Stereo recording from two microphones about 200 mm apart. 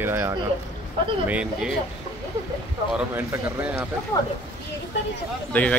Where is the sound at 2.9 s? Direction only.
10° right (ahead or behind).